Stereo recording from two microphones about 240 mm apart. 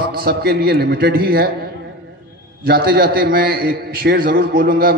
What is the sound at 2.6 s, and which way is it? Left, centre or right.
A man's voice, right.